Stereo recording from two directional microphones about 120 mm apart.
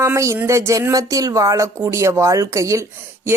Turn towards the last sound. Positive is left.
turn(degrees=-25)  # may be behind; listen again after turning